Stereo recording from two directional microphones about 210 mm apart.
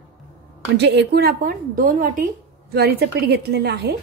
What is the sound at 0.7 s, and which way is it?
A woman's voice, 55° right (ahead or behind).